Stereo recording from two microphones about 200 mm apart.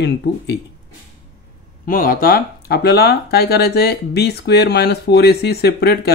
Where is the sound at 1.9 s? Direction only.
45° left (ahead or behind).